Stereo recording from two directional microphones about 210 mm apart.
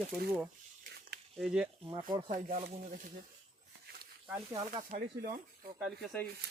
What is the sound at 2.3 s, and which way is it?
Speech, 40° right (ahead or behind).